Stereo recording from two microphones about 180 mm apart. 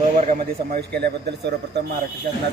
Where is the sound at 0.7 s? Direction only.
65° right (ahead or behind).